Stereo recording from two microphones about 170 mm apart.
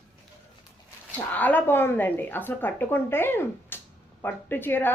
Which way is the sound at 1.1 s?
10° left (ahead or behind).